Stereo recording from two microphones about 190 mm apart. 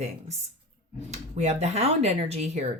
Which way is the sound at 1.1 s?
35° right (ahead or behind).